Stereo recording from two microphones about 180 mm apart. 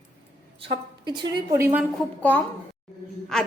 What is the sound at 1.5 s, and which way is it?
Speech, 15° right (ahead or behind).